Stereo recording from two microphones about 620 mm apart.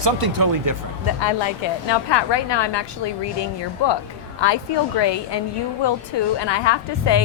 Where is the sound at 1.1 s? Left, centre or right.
Left.